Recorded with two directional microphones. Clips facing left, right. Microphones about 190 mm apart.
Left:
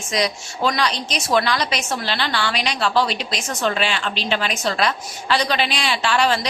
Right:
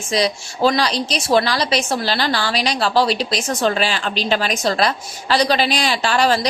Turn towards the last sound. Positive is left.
turn(degrees=-40)  # may be behind; listen again after turning